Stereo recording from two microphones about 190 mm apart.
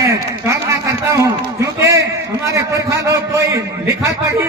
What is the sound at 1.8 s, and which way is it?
A man's voice, 15° right (ahead or behind).